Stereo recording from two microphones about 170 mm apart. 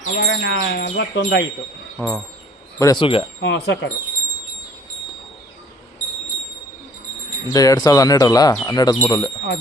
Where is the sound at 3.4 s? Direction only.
90° left.